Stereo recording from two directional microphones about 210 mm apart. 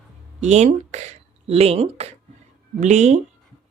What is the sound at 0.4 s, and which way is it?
Speech, 35° right (ahead or behind).